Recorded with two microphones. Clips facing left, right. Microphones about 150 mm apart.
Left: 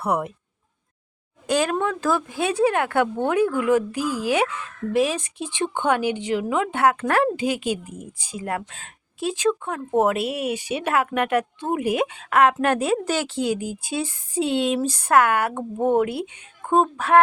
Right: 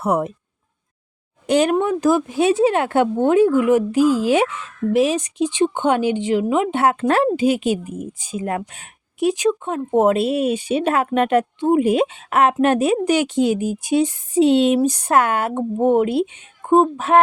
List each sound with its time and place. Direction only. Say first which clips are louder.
0.0 s a woman's voice: right 4 dB; 25° right (ahead or behind)
1.5 s a woman's voice: right 5 dB; 20° right (ahead or behind)